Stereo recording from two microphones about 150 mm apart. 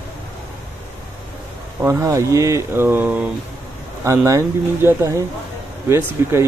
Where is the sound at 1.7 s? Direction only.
15° right (ahead or behind).